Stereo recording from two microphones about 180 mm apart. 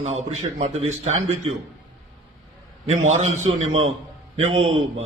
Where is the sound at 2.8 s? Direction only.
40° right (ahead or behind).